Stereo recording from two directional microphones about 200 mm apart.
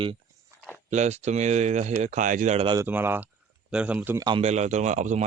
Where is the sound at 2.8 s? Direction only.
10° right (ahead or behind).